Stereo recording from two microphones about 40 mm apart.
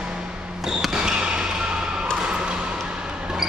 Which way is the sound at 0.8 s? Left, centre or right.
Centre.